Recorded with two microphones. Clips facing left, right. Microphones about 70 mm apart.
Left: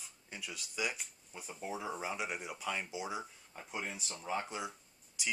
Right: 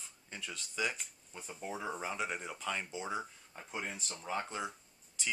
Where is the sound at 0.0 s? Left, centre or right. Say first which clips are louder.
Right 1 dB; centre.